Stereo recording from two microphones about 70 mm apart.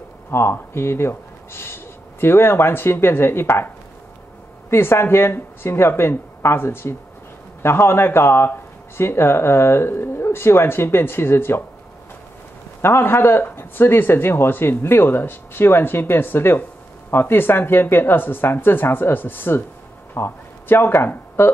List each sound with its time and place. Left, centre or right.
0.3 s a man's voice: left
12.8 s a man's voice: left